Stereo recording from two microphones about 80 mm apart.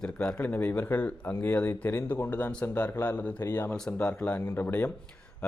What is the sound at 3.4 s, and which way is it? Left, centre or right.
Speech, left.